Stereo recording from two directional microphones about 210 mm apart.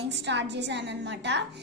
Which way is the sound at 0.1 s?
55° right (ahead or behind).